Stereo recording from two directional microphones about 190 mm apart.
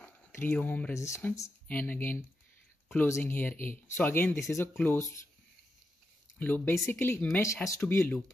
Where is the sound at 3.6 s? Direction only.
45° left (ahead or behind).